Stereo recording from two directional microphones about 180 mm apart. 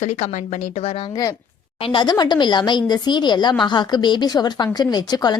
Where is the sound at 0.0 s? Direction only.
40° left (ahead or behind).